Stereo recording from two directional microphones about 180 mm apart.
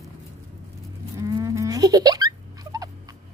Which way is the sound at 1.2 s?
20° right (ahead or behind).